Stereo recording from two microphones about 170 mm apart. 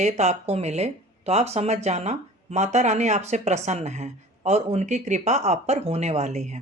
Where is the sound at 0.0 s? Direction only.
40° right (ahead or behind).